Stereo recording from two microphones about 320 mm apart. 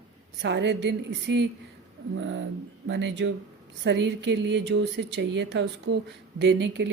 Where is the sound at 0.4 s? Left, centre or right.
Right.